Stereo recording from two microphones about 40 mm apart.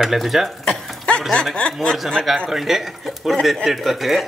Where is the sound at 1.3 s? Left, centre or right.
Left.